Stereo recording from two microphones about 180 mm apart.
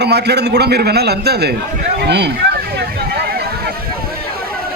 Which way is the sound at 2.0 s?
70° right (ahead or behind).